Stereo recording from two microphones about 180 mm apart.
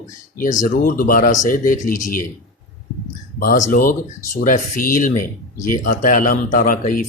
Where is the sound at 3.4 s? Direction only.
50° left (ahead or behind).